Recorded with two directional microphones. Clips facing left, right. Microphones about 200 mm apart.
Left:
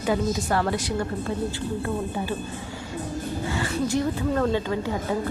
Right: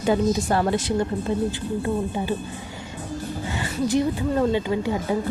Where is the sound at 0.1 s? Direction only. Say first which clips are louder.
Right 3 dB; 25° right (ahead or behind).